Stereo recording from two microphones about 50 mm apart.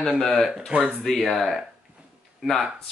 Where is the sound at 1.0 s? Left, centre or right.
Centre.